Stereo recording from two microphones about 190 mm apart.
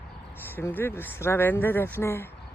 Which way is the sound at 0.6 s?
10° left (ahead or behind).